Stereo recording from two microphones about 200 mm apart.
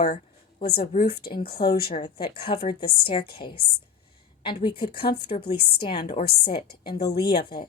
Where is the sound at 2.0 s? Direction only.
25° left (ahead or behind).